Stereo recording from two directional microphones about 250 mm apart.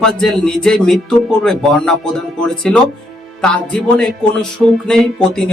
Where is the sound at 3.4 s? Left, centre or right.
Centre.